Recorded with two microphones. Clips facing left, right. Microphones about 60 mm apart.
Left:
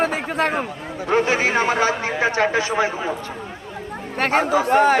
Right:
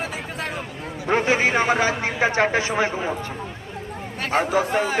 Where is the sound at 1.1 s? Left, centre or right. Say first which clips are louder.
Left 1 dB; right.